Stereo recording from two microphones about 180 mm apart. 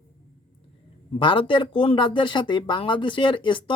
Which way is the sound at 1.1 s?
30° left (ahead or behind).